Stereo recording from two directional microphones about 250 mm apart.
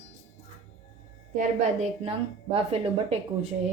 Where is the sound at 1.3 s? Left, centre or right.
Right.